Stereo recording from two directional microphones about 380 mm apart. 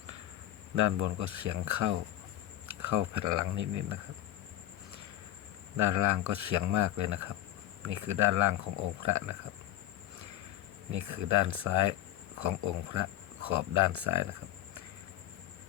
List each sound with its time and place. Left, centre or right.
0.8 s speech: right
5.7 s speech: right
10.9 s speech: right